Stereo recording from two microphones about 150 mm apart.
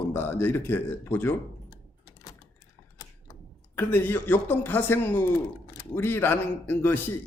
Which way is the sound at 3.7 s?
15° left (ahead or behind).